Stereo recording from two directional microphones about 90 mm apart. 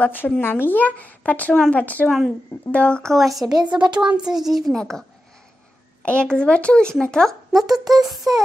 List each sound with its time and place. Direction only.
0.0 s speech: 20° left (ahead or behind)
2.0 s a child's voice: centre (ahead or behind)
2.7 s a child's voice: 10° left (ahead or behind)
3.5 s speech: 55° right (ahead or behind)
4.0 s a child's voice: 10° right (ahead or behind)
6.0 s a child's voice: 10° left (ahead or behind)